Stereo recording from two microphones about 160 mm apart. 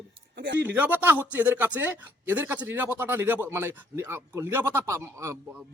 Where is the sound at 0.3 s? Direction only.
90° right.